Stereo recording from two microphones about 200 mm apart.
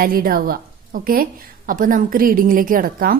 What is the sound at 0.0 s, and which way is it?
A woman's voice, 45° right (ahead or behind).